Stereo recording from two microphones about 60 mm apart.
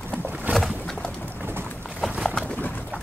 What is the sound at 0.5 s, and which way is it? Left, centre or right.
Boat, right.